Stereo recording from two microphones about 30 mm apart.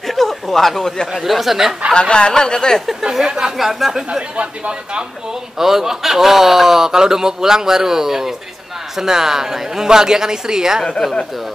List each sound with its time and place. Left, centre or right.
0.0 s a sound: centre
1.1 s speech: centre
2.0 s speech: left
3.0 s speech: centre
3.5 s speech: centre
4.4 s speech: right
5.6 s a man's voice: centre